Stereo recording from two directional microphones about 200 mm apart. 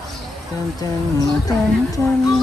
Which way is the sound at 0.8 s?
20° left (ahead or behind).